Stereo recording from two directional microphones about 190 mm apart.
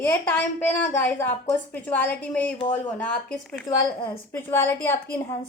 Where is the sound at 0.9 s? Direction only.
10° left (ahead or behind).